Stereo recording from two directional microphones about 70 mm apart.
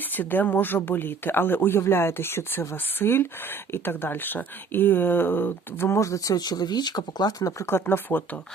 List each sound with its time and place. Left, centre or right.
0.1 s speech: left
6.0 s speech: left
7.7 s speech: left